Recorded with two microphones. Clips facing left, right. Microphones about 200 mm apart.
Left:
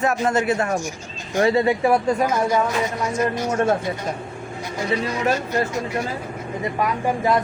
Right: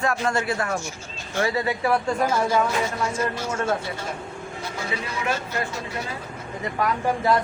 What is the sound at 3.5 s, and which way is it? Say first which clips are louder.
Speech: left 6 dB; 40° left (ahead or behind).